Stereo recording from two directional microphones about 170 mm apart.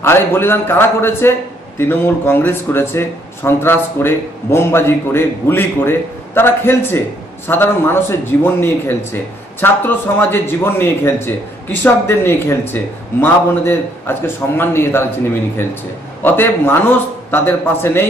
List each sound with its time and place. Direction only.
0.0 s speech: 15° left (ahead or behind)
16.2 s speech: 10° left (ahead or behind)